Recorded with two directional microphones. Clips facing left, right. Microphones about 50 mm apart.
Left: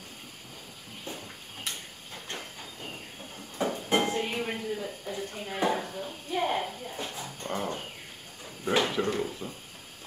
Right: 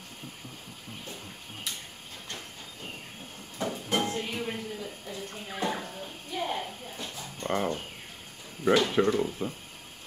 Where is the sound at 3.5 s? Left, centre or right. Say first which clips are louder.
Left 3 dB; centre.